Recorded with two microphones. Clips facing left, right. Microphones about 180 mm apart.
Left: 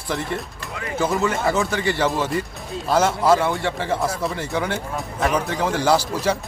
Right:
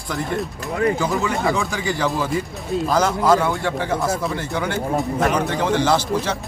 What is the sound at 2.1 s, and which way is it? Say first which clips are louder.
A man's voice: right 1 dB; centre (ahead or behind).